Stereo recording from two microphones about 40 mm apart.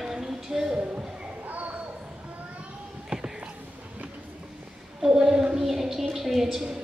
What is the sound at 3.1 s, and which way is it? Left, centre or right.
Whispering, right.